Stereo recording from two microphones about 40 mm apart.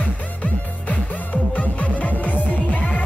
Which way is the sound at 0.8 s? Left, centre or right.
Left.